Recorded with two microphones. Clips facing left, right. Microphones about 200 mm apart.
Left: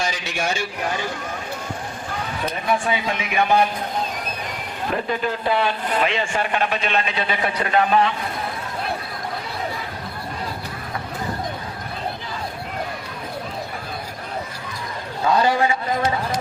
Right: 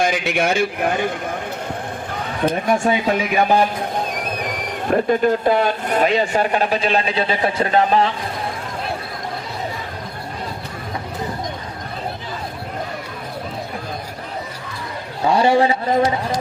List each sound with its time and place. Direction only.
0.0 s a man's voice: 55° right (ahead or behind)
2.6 s speech: 45° right (ahead or behind)
4.9 s speech: 45° right (ahead or behind); by 8.1 s 30° right (ahead or behind)
15.2 s a man's voice: 30° right (ahead or behind)